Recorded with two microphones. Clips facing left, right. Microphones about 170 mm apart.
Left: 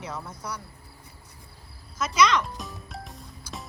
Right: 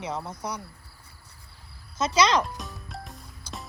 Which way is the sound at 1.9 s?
30° right (ahead or behind).